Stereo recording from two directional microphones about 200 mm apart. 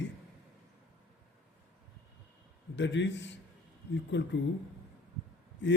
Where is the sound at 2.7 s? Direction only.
65° left (ahead or behind).